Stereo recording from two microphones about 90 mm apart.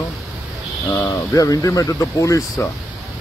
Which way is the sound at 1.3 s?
40° left (ahead or behind).